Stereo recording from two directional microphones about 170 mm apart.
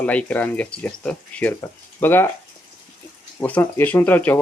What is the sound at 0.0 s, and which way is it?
Speech, 5° left (ahead or behind).